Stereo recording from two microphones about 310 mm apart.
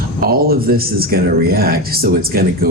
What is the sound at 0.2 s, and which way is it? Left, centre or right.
Speech, right.